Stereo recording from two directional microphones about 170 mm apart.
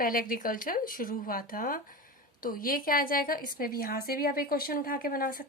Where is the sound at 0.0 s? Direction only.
55° left (ahead or behind).